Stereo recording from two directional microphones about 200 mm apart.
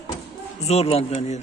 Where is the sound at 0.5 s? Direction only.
30° left (ahead or behind).